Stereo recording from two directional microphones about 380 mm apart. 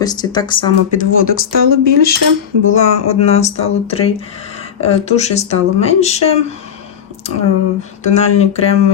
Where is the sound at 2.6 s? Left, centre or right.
Centre.